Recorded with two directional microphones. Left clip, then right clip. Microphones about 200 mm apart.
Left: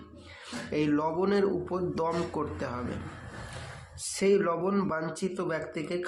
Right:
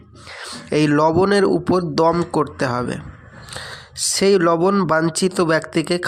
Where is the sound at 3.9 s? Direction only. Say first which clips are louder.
Right 10 dB; 50° right (ahead or behind).